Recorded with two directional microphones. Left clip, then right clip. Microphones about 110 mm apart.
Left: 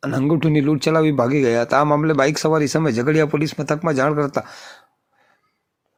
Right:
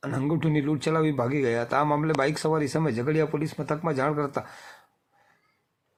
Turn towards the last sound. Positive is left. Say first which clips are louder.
# left 7 dB
turn(degrees=30)  # may be behind; listen again after turning